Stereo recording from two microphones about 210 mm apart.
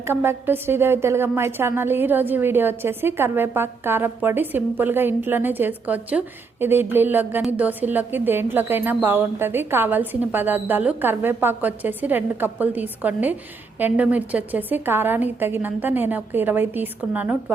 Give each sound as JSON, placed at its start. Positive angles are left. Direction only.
{"t": 0.0, "sound": "a woman's voice", "side_deg": -10}